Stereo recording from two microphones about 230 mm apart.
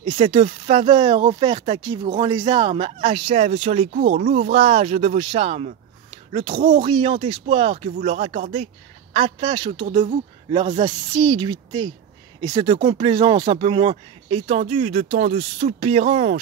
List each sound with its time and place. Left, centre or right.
0.0 s speech: right